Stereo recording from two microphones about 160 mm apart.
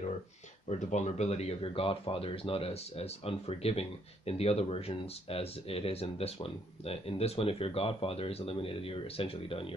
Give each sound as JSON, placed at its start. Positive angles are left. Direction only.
{"t": 0.7, "sound": "speech", "side_deg": 45}